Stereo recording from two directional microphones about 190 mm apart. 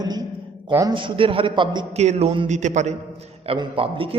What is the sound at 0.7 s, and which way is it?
A man's voice, 20° right (ahead or behind).